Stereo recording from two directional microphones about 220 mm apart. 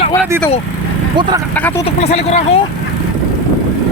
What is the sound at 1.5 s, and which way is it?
Speech, 5° left (ahead or behind).